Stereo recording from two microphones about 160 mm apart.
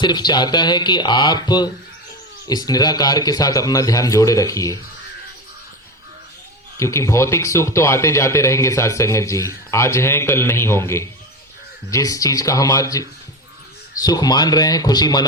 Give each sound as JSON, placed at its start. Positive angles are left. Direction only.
{"t": 0.0, "sound": "a man's voice", "side_deg": 25}
{"t": 6.7, "sound": "a man's voice", "side_deg": 20}